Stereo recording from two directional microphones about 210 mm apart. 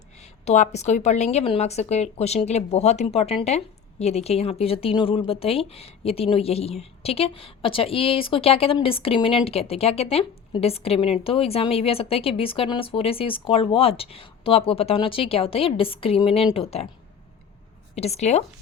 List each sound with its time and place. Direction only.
0.2 s a woman's voice: 35° left (ahead or behind)
17.9 s speech: 30° left (ahead or behind)